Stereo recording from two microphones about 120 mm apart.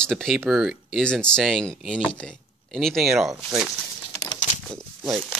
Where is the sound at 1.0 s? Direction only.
10° left (ahead or behind).